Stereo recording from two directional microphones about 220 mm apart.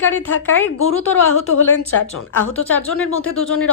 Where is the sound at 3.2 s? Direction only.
70° left (ahead or behind).